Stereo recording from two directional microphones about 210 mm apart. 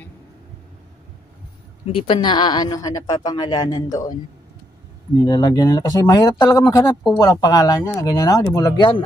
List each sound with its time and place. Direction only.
2.0 s a woman's voice: 20° left (ahead or behind)
5.2 s a woman's voice: 15° left (ahead or behind)